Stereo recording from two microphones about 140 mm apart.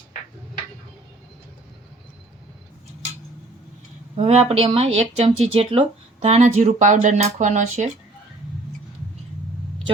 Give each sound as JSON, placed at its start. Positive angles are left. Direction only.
{"t": 4.2, "sound": "speech", "side_deg": -50}